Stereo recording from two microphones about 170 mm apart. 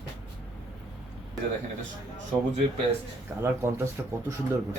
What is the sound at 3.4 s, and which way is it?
Speech, 15° right (ahead or behind).